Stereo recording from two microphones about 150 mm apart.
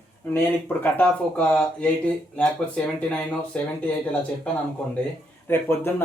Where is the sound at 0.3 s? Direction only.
10° left (ahead or behind).